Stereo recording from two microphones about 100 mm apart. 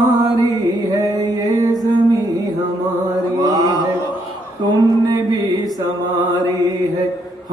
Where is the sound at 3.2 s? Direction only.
40° right (ahead or behind).